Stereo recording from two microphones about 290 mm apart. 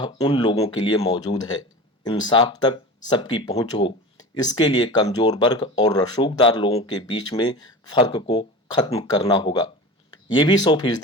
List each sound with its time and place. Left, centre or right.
0.0 s speech: centre